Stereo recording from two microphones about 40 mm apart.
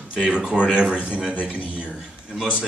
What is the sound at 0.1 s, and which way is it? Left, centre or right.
Speech, right.